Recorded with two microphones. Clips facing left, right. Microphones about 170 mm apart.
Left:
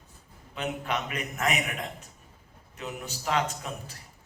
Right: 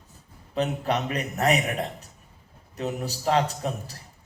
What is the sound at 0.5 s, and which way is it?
A man's voice, 35° right (ahead or behind).